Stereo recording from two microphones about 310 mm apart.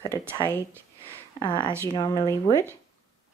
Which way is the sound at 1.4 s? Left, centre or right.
Centre.